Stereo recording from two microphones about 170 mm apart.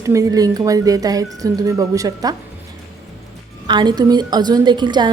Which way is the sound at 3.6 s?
25° right (ahead or behind).